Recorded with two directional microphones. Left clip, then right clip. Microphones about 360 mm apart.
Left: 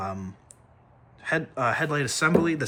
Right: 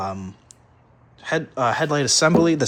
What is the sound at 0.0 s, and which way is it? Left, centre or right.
Speech, centre.